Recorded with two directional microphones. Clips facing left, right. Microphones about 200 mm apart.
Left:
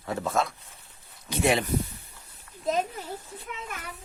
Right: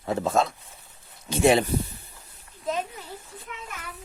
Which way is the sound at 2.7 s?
40° left (ahead or behind).